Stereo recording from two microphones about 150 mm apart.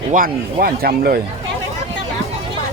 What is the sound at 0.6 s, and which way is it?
Speech, 85° right.